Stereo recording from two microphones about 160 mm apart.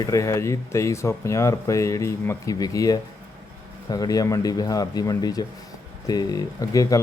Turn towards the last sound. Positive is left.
turn(degrees=20)  # may be behind; listen again after turning